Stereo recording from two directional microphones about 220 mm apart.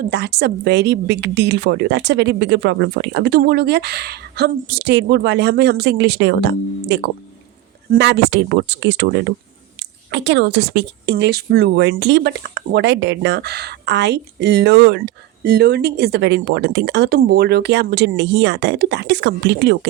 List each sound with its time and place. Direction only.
0.1 s a woman's voice: 50° right (ahead or behind)